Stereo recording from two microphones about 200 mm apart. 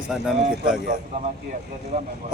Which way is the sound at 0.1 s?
5° right (ahead or behind).